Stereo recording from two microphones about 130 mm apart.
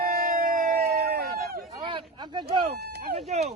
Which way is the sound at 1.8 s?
40° right (ahead or behind).